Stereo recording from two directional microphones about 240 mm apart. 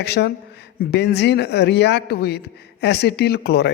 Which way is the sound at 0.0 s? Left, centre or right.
Left.